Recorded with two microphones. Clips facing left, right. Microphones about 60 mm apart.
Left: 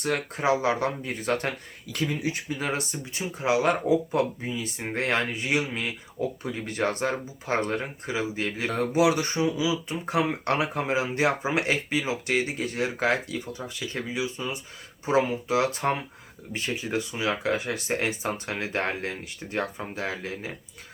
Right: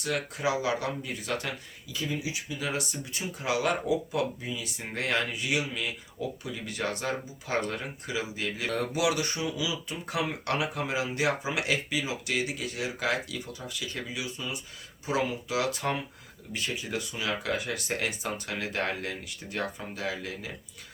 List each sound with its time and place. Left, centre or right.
0.0 s speech: left
1.9 s speech: left